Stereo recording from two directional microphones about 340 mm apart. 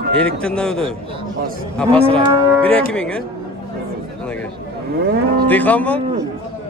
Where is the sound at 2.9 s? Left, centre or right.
Centre.